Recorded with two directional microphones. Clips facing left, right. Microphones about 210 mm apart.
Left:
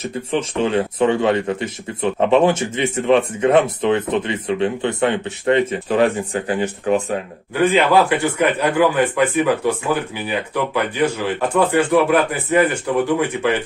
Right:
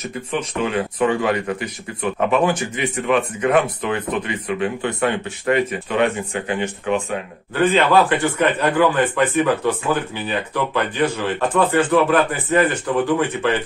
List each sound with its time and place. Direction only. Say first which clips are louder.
0.0 s speech: left 3 dB; 30° left (ahead or behind)
7.6 s a man's voice: left 1 dB; 10° left (ahead or behind)